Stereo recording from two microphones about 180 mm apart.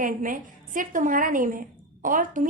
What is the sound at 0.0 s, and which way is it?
A woman's voice, 45° right (ahead or behind).